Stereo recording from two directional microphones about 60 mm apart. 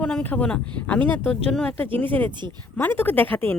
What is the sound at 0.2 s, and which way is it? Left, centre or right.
Speech, left.